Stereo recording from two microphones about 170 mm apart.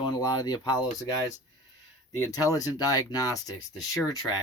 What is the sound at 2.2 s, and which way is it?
Speech, 20° left (ahead or behind).